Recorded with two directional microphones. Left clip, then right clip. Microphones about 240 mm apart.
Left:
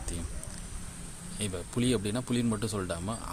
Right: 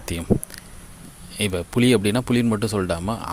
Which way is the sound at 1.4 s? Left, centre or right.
Right.